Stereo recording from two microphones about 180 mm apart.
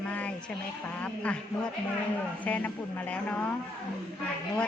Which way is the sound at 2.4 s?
10° left (ahead or behind).